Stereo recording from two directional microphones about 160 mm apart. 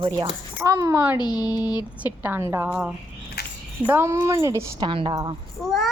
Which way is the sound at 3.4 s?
90° left.